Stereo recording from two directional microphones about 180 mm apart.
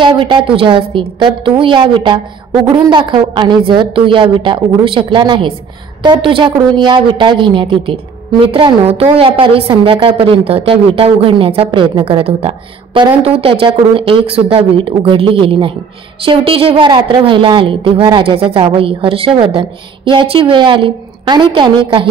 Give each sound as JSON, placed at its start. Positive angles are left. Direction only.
{"t": 0.0, "sound": "a woman's voice", "side_deg": -25}